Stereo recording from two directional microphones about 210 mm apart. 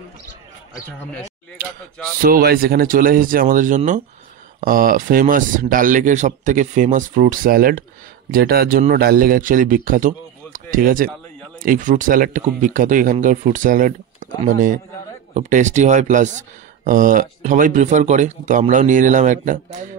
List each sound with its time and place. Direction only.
0.7 s a man's voice: 15° left (ahead or behind)
2.2 s speech: 45° right (ahead or behind)